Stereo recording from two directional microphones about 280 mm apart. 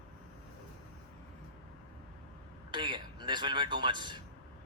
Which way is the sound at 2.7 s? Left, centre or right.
Centre.